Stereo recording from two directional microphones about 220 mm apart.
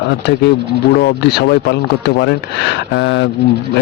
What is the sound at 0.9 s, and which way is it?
Speech, 50° left (ahead or behind).